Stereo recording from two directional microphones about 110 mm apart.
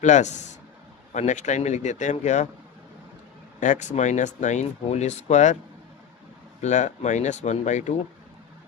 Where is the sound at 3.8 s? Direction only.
90° left.